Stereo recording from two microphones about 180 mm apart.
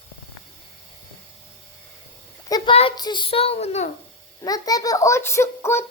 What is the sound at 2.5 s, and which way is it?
A child's voice, 25° left (ahead or behind).